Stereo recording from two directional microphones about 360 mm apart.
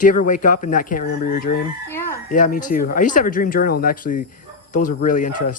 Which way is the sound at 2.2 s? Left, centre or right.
Left.